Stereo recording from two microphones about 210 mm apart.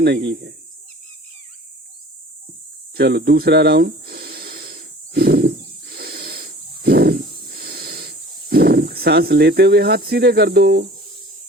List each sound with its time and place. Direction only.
0.0 s speech: 55° right (ahead or behind)
2.9 s snake: 50° right (ahead or behind)